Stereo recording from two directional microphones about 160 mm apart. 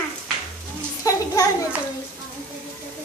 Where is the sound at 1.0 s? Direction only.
20° left (ahead or behind).